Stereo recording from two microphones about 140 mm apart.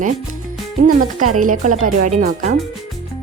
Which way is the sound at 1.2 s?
70° right (ahead or behind).